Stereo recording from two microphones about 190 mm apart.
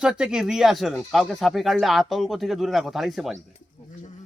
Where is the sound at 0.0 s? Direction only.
5° right (ahead or behind).